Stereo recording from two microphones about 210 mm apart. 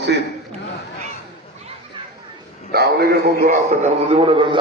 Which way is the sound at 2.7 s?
50° right (ahead or behind).